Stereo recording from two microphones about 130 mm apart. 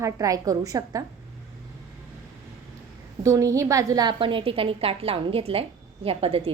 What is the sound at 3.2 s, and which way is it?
A woman's voice, 25° right (ahead or behind).